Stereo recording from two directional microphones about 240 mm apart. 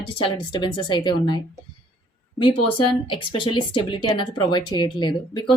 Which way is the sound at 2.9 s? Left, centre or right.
Left.